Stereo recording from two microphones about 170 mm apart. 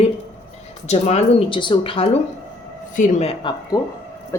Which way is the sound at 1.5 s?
30° left (ahead or behind).